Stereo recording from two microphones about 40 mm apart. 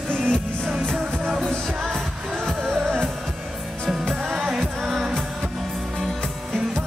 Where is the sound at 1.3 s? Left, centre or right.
Centre.